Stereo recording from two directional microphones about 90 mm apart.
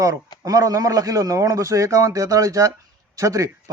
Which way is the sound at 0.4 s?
40° right (ahead or behind).